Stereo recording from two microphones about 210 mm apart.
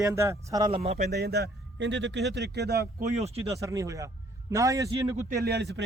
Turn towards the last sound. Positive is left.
turn(degrees=-55)  # may be behind; listen again after turning